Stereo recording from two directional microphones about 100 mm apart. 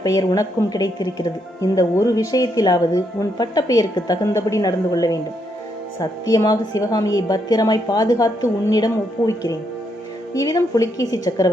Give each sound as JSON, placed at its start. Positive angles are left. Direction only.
{"t": 0.0, "sound": "speech", "side_deg": 40}